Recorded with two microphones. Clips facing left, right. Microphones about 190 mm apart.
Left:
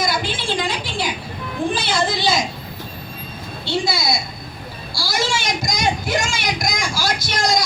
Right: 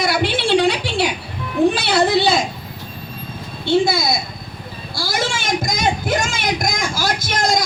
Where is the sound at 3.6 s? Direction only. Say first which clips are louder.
Right 6 dB; 50° right (ahead or behind).